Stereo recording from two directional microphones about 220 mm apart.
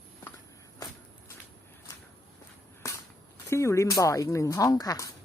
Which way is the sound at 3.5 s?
15° left (ahead or behind).